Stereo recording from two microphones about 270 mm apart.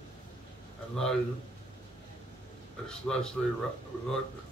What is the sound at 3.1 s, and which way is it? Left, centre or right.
Speech, centre.